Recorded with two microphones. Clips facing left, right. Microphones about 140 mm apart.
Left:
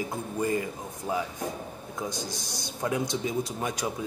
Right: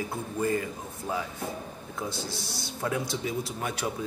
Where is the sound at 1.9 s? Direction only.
15° left (ahead or behind).